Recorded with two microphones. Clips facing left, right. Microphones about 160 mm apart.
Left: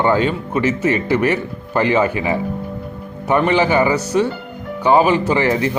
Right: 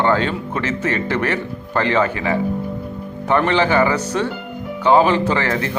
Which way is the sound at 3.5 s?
10° left (ahead or behind).